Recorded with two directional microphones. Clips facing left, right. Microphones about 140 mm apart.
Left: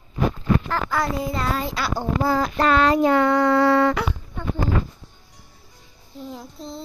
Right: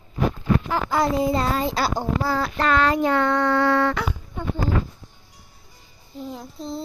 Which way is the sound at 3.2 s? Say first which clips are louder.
Left 3 dB; 5° left (ahead or behind).